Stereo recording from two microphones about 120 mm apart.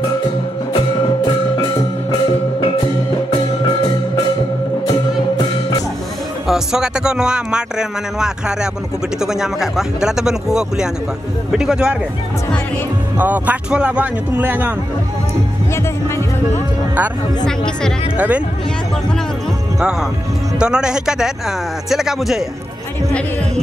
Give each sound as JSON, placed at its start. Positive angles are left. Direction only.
{"t": 0.7, "sound": "music", "side_deg": 40}
{"t": 6.4, "sound": "speech", "side_deg": -5}
{"t": 9.2, "sound": "speech", "side_deg": -5}
{"t": 13.2, "sound": "speech", "side_deg": -15}
{"t": 18.1, "sound": "speech", "side_deg": -10}
{"t": 19.8, "sound": "speech", "side_deg": -5}